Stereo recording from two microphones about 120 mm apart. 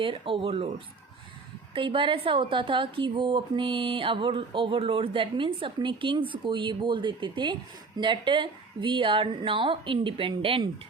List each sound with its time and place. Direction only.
0.0 s a woman's voice: 45° right (ahead or behind)
1.7 s a woman's voice: 45° right (ahead or behind)